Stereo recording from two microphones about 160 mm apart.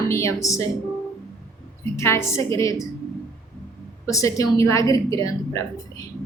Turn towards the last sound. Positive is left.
turn(degrees=20)  # may be behind; listen again after turning